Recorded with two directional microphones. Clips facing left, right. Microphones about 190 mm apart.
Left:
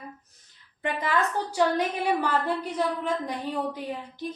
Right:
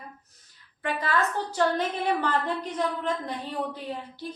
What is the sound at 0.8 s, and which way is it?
A woman's voice, 15° left (ahead or behind).